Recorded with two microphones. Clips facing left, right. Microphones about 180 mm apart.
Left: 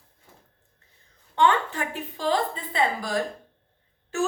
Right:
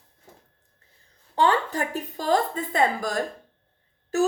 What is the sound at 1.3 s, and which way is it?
A woman's voice, 35° right (ahead or behind).